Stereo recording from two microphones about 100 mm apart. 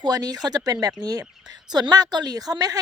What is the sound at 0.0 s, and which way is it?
Speech, 40° right (ahead or behind).